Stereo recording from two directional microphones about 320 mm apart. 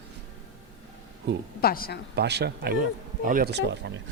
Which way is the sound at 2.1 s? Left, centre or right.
Right.